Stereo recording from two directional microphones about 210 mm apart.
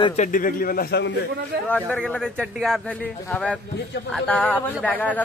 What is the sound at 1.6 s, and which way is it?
A man's voice, 5° left (ahead or behind).